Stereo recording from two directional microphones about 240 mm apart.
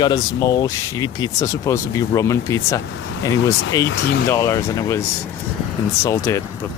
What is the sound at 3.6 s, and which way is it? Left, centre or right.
Speech, left.